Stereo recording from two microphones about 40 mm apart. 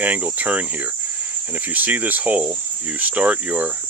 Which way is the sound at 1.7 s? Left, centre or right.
Right.